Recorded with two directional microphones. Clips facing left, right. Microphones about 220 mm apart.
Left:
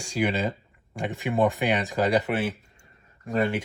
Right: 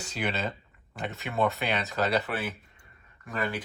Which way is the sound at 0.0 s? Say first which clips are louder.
Left 6 dB; 10° left (ahead or behind).